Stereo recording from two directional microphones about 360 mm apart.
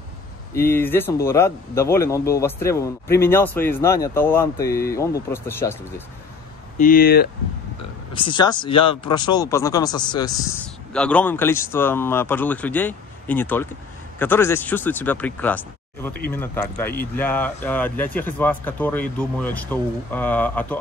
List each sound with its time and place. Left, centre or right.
0.6 s speech: centre
6.8 s speech: left
8.1 s speech: centre